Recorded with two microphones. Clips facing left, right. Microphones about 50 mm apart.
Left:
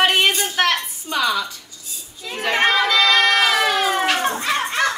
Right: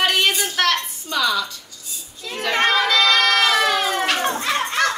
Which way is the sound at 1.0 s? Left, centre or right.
Left.